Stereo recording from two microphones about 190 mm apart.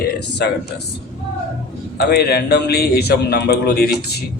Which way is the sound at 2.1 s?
55° left (ahead or behind).